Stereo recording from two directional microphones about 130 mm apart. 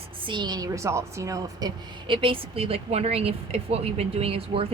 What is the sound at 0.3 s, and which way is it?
A woman's voice, 35° right (ahead or behind).